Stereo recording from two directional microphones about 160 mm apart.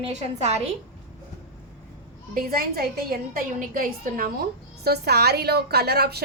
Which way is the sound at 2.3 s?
65° right (ahead or behind).